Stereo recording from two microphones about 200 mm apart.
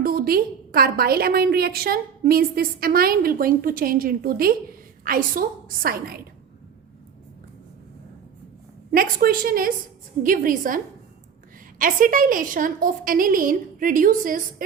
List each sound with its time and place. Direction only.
0.0 s a woman's voice: 45° right (ahead or behind)
8.9 s a woman's voice: 45° right (ahead or behind)
11.8 s a woman's voice: 45° right (ahead or behind)